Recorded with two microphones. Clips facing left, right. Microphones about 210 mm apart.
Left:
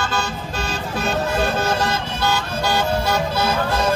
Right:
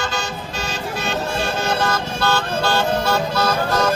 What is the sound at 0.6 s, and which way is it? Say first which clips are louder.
Vehicle: left 2 dB; 35° left (ahead or behind).